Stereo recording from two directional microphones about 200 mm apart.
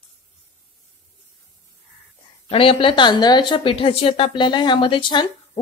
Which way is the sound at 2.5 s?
25° left (ahead or behind).